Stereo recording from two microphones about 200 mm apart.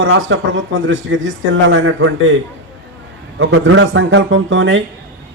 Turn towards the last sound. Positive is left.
turn(degrees=-70)  # may be behind; listen again after turning